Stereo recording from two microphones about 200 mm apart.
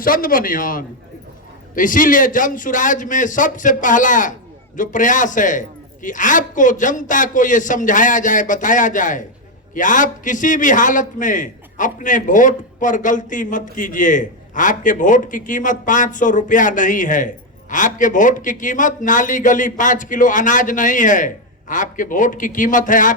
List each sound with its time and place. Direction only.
0.0 s a man's voice: 45° left (ahead or behind)